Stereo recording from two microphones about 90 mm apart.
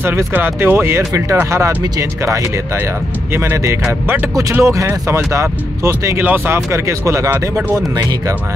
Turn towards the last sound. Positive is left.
turn(degrees=-35)  # may be behind; listen again after turning